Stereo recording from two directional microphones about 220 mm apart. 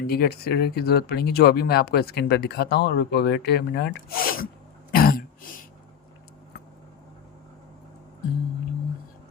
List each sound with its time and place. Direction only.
0.1 s speech: 45° left (ahead or behind)
4.9 s throat clearing: 40° left (ahead or behind)